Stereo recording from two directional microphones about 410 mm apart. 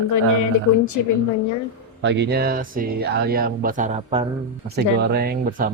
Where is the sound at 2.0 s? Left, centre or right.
Right.